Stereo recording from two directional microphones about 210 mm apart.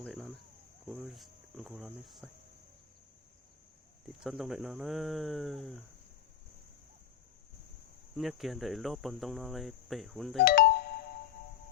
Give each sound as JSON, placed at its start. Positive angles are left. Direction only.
{"t": 0.0, "sound": "a sound", "side_deg": 0}
{"t": 0.9, "sound": "cricket", "side_deg": 0}
{"t": 4.2, "sound": "cricket", "side_deg": 0}
{"t": 8.1, "sound": "cricket", "side_deg": 0}
{"t": 10.4, "sound": "doorbell", "side_deg": 45}